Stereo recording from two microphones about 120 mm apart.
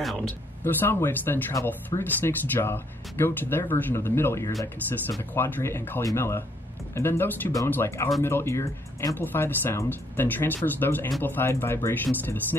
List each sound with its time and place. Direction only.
0.7 s speech: 15° left (ahead or behind)